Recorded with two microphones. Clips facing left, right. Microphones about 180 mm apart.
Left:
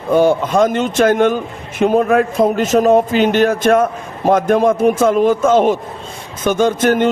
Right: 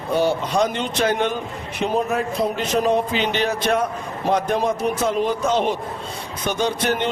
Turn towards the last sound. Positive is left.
turn(degrees=45)  # may be behind; listen again after turning